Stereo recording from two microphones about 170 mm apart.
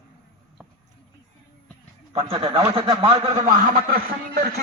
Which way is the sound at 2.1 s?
35° right (ahead or behind).